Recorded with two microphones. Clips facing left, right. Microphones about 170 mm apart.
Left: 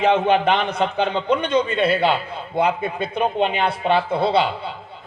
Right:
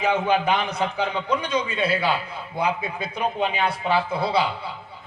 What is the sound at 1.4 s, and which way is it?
A man's voice, 55° left (ahead or behind).